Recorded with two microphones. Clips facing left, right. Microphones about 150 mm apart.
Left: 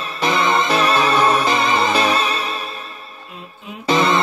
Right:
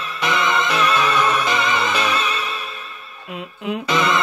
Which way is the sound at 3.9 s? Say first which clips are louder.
Left 4 dB; 30° left (ahead or behind).